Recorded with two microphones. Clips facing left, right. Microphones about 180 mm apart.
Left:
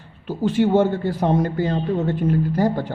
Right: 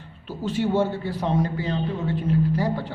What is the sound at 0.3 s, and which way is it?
A woman's voice, 55° left (ahead or behind).